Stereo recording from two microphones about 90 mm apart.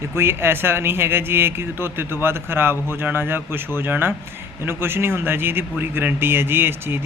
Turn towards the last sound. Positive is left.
turn(degrees=-25)  # may be behind; listen again after turning